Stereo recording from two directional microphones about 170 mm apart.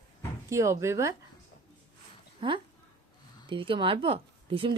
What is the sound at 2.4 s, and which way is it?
Speech, 30° right (ahead or behind).